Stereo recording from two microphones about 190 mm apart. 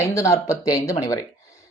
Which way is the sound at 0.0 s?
15° left (ahead or behind).